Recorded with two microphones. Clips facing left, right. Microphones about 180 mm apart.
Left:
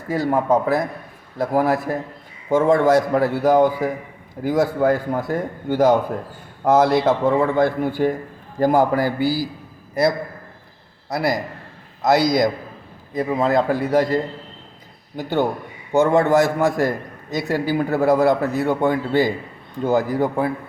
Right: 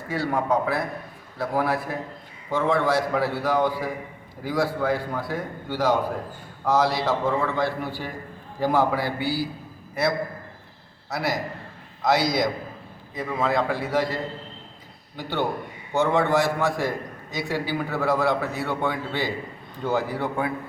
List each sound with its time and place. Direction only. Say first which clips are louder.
0.1 s a man's voice: left 6 dB; 45° left (ahead or behind)
12.0 s a man's voice: left 5 dB; 45° left (ahead or behind)